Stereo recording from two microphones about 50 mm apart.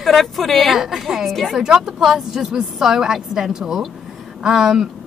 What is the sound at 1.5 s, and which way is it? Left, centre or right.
A woman's voice, centre.